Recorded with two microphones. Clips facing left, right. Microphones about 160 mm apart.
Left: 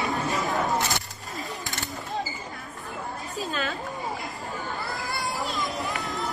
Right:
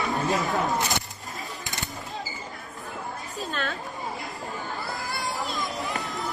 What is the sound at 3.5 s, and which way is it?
Speech, centre (ahead or behind).